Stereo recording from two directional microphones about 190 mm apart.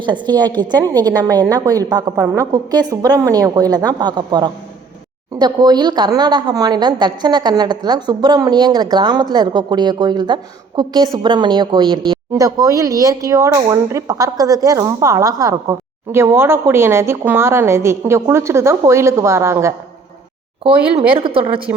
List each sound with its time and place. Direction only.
0.0 s a woman's voice: 25° right (ahead or behind)
21.1 s a woman's voice: 30° right (ahead or behind)